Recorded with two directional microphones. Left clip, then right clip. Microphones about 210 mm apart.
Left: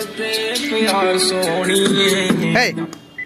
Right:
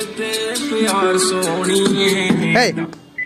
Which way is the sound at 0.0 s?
45° right (ahead or behind).